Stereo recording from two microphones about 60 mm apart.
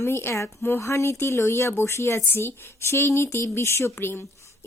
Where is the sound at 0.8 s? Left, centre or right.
Left.